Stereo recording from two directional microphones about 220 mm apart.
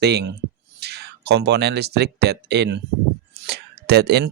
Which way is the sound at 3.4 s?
45° right (ahead or behind).